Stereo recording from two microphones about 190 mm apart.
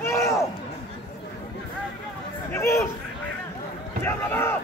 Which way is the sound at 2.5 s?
15° left (ahead or behind).